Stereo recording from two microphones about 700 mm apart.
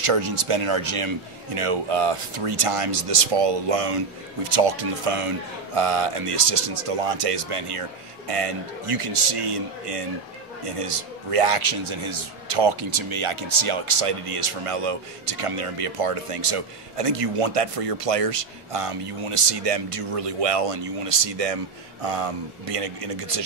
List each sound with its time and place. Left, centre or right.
0.0 s a man's voice: right